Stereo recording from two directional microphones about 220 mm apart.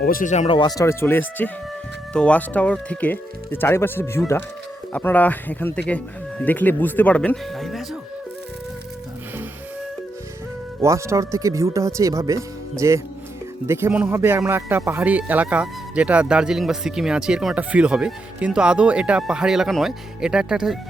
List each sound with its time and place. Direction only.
0.0 s speech: 40° left (ahead or behind); by 7.9 s centre (ahead or behind)
10.8 s a man's voice: 15° right (ahead or behind)